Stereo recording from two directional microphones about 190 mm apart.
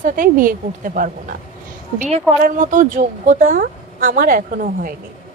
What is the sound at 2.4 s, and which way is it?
Speech, 45° right (ahead or behind).